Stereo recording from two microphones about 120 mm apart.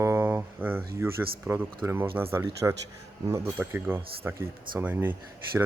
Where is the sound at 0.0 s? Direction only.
20° right (ahead or behind).